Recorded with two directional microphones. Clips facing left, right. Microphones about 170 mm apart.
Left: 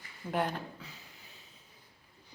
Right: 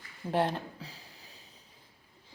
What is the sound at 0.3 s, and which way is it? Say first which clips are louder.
Speech: right 3 dB; 30° right (ahead or behind).